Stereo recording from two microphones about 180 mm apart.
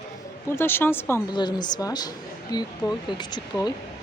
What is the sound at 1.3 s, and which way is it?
A woman's voice, 25° left (ahead or behind).